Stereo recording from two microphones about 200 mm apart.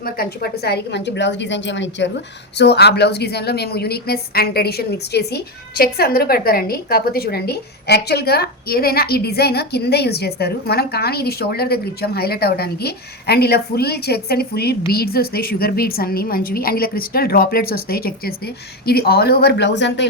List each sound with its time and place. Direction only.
0.0 s a woman's voice: 50° left (ahead or behind)